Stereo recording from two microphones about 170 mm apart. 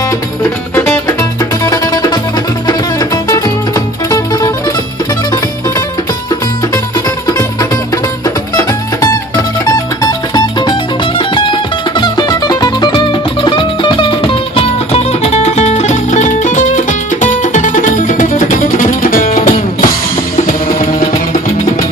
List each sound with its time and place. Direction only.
1.6 s music: 20° left (ahead or behind)
3.2 s music: 20° left (ahead or behind)
8.5 s music: 20° left (ahead or behind); by 19.5 s 50° left (ahead or behind)